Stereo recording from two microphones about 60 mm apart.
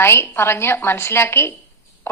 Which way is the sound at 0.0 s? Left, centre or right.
Left.